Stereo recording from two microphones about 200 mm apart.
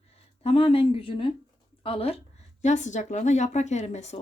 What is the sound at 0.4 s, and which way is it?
Speech, 30° left (ahead or behind).